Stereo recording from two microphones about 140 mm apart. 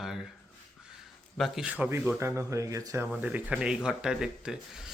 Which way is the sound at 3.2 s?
10° right (ahead or behind).